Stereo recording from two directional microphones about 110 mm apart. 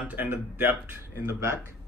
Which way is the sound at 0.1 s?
15° right (ahead or behind).